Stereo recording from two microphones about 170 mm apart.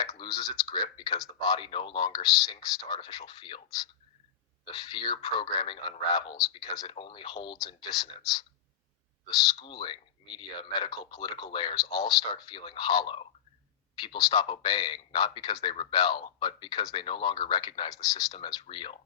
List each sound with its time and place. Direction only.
0.0 s speech: 25° left (ahead or behind)
4.6 s speech: 25° left (ahead or behind)
9.6 s speech: 30° left (ahead or behind)